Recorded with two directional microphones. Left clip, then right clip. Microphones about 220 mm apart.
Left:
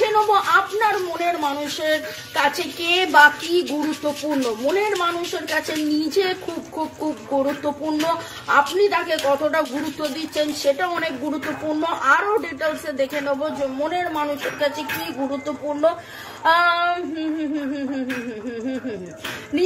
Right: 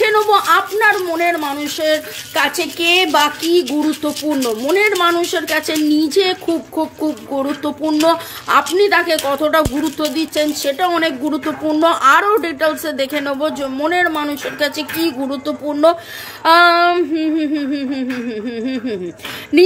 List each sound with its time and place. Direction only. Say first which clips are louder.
0.0 s a sound: right 4 dB; 30° right (ahead or behind)
1.8 s a woman's voice: right 8 dB; 25° right (ahead or behind)
7.4 s a woman's voice: right 4 dB; 30° right (ahead or behind)
16.4 s female singing: right 7 dB; 45° right (ahead or behind)
19.5 s a woman's voice: right 10 dB; 40° right (ahead or behind)